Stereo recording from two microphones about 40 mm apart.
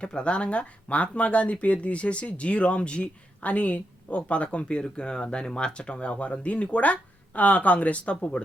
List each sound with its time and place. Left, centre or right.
0.0 s speech: left
4.8 s speech: left